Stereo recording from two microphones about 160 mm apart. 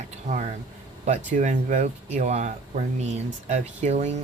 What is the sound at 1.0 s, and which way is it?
Speech, 50° right (ahead or behind).